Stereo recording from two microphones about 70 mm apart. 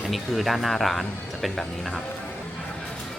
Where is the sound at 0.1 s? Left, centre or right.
Centre.